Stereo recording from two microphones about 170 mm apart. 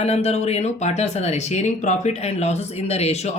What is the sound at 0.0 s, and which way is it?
Speech, 40° left (ahead or behind).